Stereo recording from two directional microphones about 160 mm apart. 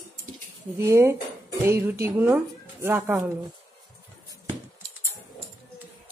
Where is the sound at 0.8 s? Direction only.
15° right (ahead or behind).